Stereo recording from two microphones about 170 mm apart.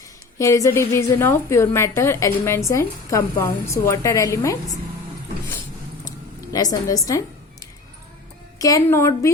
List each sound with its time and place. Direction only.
0.3 s a woman's voice: 20° left (ahead or behind)
6.1 s a sound: 20° left (ahead or behind)
8.5 s a woman's voice: 20° left (ahead or behind)